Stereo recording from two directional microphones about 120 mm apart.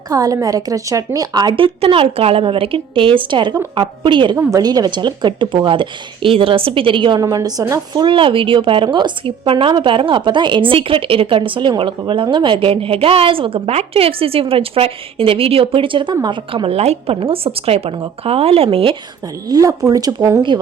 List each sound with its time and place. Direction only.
0.1 s a woman's voice: 30° right (ahead or behind)
4.4 s a woman's voice: 30° right (ahead or behind)
7.2 s speech: 30° right (ahead or behind)
7.9 s a woman's voice: 45° right (ahead or behind)
19.5 s speech: 30° right (ahead or behind)